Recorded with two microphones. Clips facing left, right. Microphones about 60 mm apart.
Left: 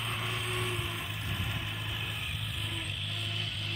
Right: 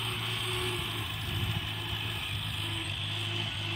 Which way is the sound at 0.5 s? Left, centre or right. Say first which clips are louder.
Right 2 dB; centre.